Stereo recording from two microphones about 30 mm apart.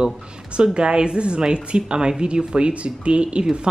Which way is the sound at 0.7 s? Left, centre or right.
Right.